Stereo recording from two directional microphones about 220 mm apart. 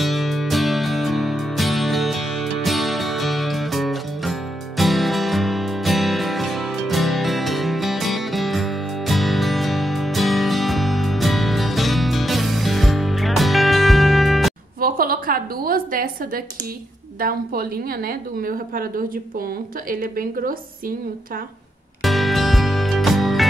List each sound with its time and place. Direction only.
0.0 s music: centre (ahead or behind)
14.8 s a sound: 40° right (ahead or behind)
17.2 s a woman's voice: 40° right (ahead or behind)
22.0 s music: centre (ahead or behind)